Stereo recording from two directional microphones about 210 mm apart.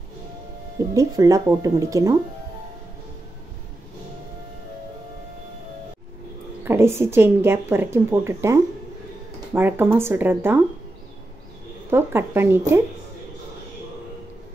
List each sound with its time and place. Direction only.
0.9 s a woman's voice: 15° right (ahead or behind)
6.6 s a woman's voice: 10° right (ahead or behind)
11.9 s a woman's voice: 10° right (ahead or behind)